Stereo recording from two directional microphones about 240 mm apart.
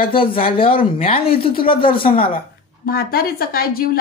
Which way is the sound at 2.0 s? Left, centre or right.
Left.